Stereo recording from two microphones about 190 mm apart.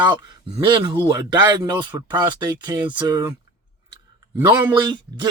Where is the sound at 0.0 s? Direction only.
20° right (ahead or behind).